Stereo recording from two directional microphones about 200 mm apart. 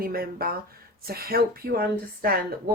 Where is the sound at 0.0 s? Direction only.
50° right (ahead or behind).